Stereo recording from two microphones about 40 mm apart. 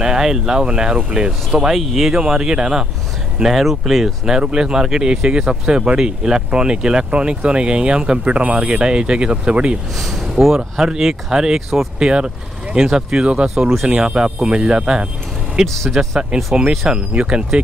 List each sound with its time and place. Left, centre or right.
0.0 s speech: centre
1.7 s speech: centre
2.1 s speech: centre
3.4 s speech: centre
4.3 s speech: right
8.8 s speech: right
9.9 s speech: centre
10.4 s speech: centre
15.6 s speech: centre
16.3 s speech: right